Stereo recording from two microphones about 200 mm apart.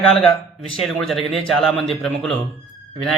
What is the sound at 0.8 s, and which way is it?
A man's voice, centre (ahead or behind).